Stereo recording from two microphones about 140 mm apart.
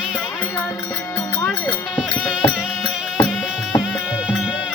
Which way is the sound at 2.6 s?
5° right (ahead or behind).